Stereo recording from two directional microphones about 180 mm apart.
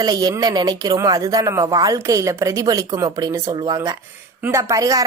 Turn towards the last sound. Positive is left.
turn(degrees=-20)  # may be behind; listen again after turning